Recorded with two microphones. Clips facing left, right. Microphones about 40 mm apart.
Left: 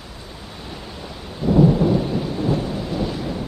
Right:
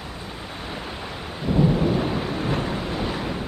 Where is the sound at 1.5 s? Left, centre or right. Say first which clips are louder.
Left 6 dB; centre.